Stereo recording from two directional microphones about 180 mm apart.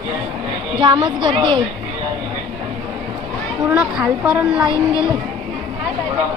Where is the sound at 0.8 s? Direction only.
25° right (ahead or behind).